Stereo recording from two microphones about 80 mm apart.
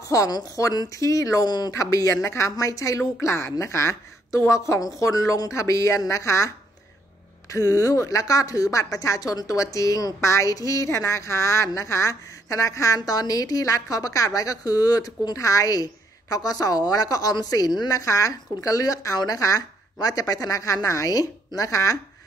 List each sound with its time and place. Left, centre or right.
0.1 s speech: left
1.8 s a woman's voice: left